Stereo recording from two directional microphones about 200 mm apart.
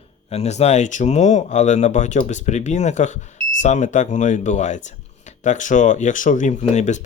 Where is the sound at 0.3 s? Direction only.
35° left (ahead or behind).